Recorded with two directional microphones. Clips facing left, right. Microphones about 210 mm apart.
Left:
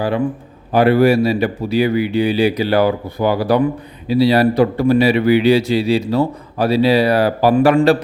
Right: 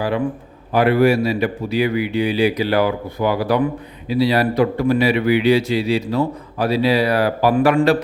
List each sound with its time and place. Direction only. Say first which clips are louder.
0.7 s speech: left 3 dB; 30° left (ahead or behind)